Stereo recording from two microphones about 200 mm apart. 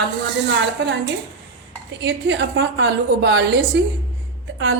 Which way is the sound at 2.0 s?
60° right (ahead or behind).